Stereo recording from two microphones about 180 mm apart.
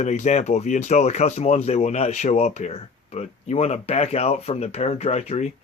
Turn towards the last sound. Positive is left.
turn(degrees=35)  # may be behind; listen again after turning